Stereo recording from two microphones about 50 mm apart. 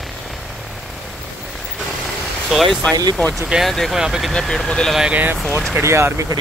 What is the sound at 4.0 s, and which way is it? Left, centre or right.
Speech, centre.